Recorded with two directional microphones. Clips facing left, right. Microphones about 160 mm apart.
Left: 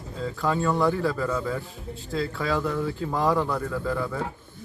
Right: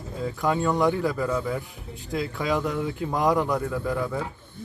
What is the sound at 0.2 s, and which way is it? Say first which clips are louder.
Speech: right 1 dB; 15° right (ahead or behind).